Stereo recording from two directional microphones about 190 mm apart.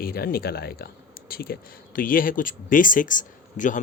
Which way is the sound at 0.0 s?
50° left (ahead or behind).